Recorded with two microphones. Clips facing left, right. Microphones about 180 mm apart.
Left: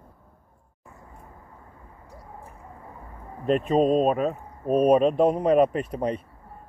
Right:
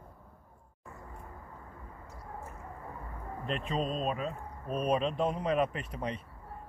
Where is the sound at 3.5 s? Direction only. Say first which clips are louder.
Left 13 dB; 45° left (ahead or behind).